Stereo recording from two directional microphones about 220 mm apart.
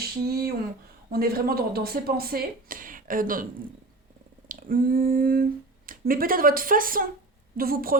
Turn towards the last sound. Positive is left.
turn(degrees=-40)  # may be behind; listen again after turning